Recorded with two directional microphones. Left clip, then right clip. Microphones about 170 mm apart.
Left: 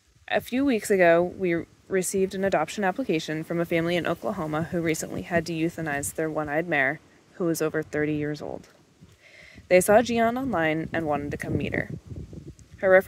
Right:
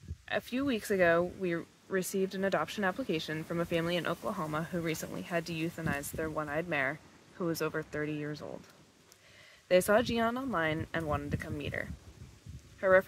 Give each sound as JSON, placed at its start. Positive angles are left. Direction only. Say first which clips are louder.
{"t": 0.2, "sound": "speech", "louder": "left 9 dB", "side_deg": 40}
{"t": 9.7, "sound": "speech", "louder": "left 8 dB", "side_deg": 35}